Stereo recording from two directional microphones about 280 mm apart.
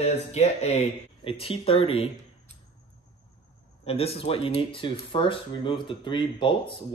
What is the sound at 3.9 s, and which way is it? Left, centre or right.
Speech, left.